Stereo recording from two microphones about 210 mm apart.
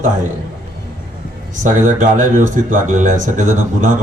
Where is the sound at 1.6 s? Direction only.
40° right (ahead or behind).